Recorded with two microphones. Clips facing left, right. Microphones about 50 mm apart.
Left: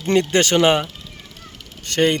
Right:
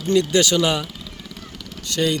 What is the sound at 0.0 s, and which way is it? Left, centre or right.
Speech, left.